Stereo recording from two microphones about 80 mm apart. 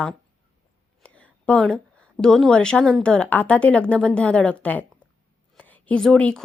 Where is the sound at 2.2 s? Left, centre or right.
Centre.